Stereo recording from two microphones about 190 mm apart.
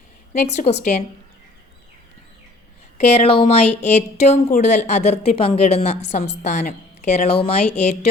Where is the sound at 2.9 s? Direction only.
35° left (ahead or behind).